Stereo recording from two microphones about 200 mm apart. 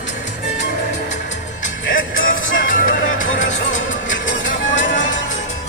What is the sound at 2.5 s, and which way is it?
Music, 40° left (ahead or behind).